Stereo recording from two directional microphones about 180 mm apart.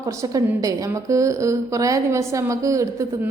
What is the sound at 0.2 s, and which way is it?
A woman's voice, 20° right (ahead or behind).